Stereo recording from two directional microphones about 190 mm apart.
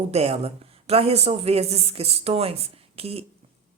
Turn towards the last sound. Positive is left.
turn(degrees=-30)  # may be behind; listen again after turning